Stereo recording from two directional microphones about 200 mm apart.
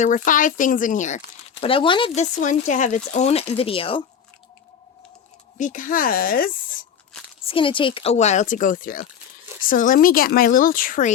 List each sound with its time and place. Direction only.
0.0 s speech: 40° left (ahead or behind)
1.6 s speech: 25° left (ahead or behind)
2.4 s speech: 40° left (ahead or behind)
5.5 s speech: 40° left (ahead or behind)
7.4 s speech: 25° left (ahead or behind); by 11.1 s 45° left (ahead or behind)